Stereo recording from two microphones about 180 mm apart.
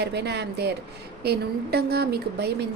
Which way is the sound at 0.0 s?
70° right (ahead or behind).